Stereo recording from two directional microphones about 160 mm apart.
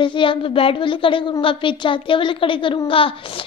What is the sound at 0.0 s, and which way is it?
A woman's voice, 30° left (ahead or behind).